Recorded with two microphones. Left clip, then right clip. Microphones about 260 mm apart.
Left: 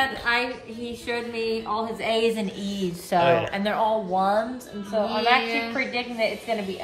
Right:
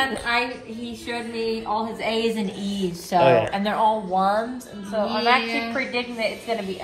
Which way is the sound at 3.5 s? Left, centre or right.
Right.